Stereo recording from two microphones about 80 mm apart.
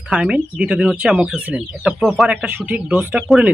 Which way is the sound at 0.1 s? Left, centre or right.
Centre.